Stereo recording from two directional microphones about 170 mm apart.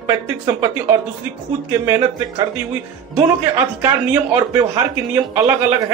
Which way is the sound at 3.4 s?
15° right (ahead or behind).